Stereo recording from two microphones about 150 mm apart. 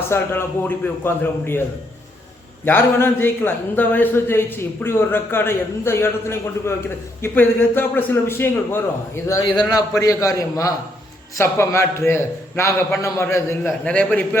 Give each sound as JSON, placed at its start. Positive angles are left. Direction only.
{"t": 0.1, "sound": "a man's voice", "side_deg": 15}
{"t": 2.6, "sound": "a man's voice", "side_deg": 15}